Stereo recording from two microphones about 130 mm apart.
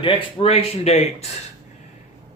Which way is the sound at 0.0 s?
45° left (ahead or behind).